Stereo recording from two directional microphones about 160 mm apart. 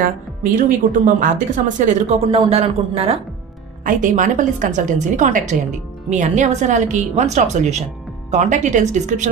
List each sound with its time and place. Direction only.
0.0 s a woman's voice: 55° right (ahead or behind); by 3.2 s 40° right (ahead or behind)
3.8 s a woman's voice: 55° right (ahead or behind)